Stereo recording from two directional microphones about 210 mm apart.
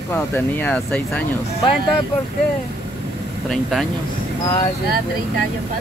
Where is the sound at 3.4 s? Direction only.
Centre (ahead or behind).